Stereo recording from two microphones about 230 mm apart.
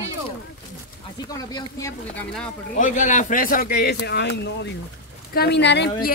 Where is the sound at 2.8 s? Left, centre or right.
Left.